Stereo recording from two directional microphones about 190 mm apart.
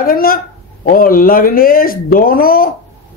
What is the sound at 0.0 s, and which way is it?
Speech, 50° left (ahead or behind).